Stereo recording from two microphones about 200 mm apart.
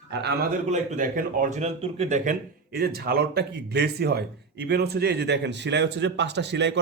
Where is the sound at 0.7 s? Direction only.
35° right (ahead or behind).